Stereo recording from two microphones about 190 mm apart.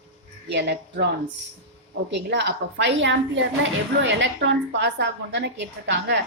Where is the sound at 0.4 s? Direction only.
60° right (ahead or behind).